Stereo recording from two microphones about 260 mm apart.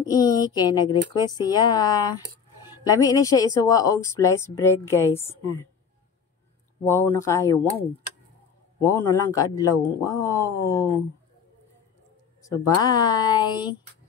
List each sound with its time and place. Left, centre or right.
0.1 s speech: centre
6.9 s speech: centre
8.8 s speech: centre
12.4 s speech: centre